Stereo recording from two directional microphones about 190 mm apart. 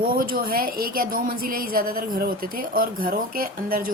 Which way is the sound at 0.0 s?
50° right (ahead or behind).